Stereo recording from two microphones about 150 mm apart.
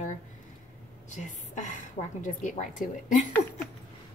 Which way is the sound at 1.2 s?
55° left (ahead or behind).